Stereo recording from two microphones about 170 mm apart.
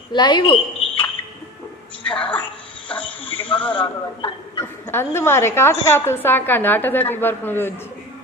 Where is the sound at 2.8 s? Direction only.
10° left (ahead or behind).